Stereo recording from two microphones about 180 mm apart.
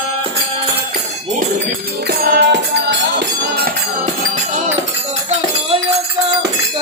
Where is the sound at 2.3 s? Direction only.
75° right (ahead or behind).